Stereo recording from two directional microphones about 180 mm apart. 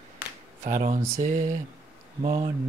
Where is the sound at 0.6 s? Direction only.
45° right (ahead or behind).